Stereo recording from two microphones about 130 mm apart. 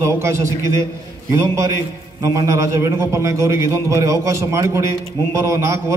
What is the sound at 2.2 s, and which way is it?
A man's voice, 25° right (ahead or behind).